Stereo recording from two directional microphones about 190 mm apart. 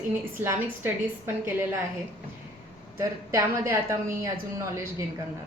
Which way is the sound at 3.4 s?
15° right (ahead or behind).